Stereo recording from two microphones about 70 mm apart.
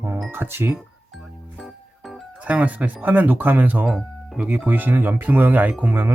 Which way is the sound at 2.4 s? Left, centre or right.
Centre.